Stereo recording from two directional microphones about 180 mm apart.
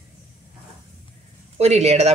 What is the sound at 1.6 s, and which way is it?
Speech, 35° right (ahead or behind).